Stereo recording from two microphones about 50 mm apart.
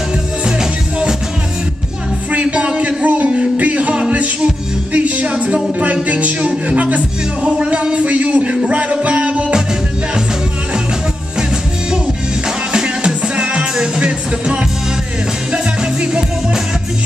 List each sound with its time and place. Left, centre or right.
2.3 s music: right
7.4 s a sound: right
12.7 s music: centre